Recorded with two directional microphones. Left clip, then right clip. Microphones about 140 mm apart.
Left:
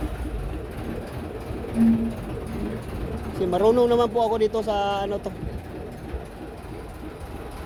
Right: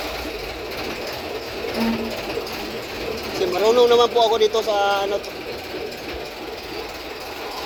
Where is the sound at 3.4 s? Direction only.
55° left (ahead or behind).